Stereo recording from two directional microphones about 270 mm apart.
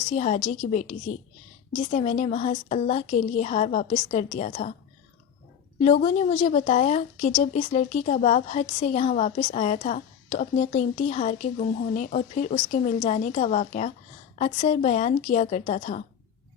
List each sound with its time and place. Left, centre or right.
0.1 s a woman's voice: left
5.8 s a woman's voice: left